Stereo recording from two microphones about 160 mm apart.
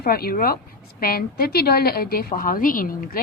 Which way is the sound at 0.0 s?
70° left (ahead or behind).